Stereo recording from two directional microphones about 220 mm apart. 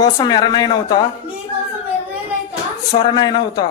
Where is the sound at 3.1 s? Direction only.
20° left (ahead or behind).